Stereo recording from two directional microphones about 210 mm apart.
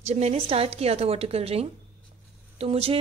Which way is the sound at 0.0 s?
30° right (ahead or behind).